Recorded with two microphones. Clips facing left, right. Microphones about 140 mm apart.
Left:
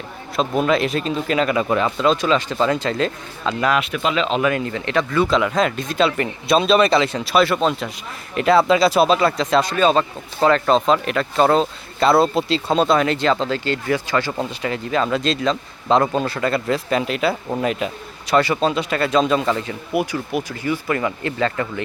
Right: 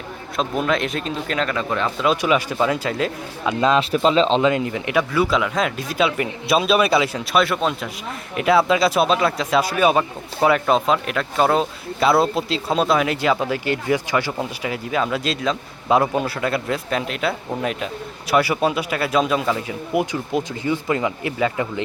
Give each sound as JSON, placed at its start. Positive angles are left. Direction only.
{"t": 0.3, "sound": "speech", "side_deg": 0}
{"t": 2.0, "sound": "speech", "side_deg": -10}
{"t": 3.6, "sound": "speech", "side_deg": -25}
{"t": 19.9, "sound": "speech", "side_deg": -20}